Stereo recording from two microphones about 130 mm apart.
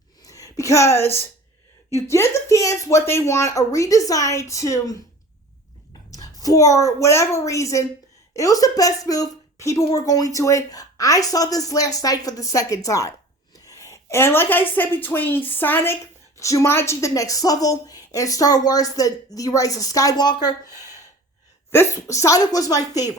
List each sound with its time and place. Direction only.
0.2 s a sound: 25° left (ahead or behind)
1.9 s a woman's voice: 20° left (ahead or behind)
6.1 s a woman's voice: 30° left (ahead or behind)